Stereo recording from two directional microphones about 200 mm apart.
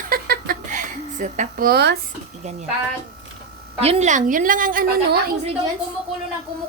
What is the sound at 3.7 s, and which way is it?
A woman's voice, 30° right (ahead or behind).